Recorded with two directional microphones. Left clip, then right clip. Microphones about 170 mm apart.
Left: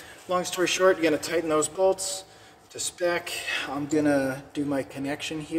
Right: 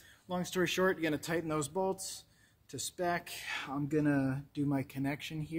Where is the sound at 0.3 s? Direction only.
65° right (ahead or behind).